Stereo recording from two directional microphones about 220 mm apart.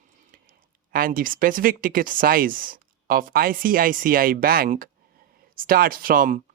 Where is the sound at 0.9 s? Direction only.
40° right (ahead or behind).